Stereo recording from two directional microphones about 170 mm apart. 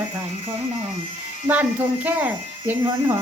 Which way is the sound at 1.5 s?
10° right (ahead or behind).